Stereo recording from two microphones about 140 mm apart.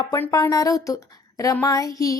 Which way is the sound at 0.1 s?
25° left (ahead or behind).